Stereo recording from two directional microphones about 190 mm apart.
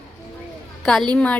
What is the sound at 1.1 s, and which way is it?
Speech, 5° left (ahead or behind).